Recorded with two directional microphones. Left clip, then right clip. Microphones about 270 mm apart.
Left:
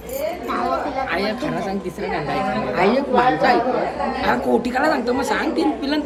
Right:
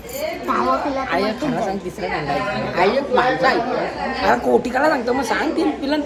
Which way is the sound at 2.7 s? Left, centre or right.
Centre.